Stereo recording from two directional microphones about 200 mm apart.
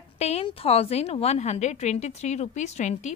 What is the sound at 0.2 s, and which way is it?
A woman's voice, 30° left (ahead or behind).